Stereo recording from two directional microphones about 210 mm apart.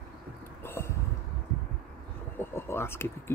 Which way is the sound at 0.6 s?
10° left (ahead or behind).